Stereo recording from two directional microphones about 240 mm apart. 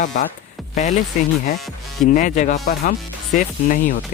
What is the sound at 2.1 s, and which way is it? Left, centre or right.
Speech, left.